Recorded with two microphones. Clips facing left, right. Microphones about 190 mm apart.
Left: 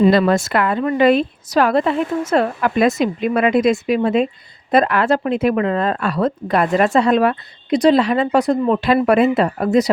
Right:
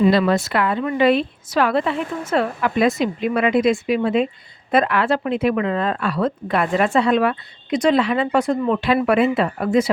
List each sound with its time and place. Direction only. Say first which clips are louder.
0.1 s a woman's voice: left 3 dB; 50° left (ahead or behind)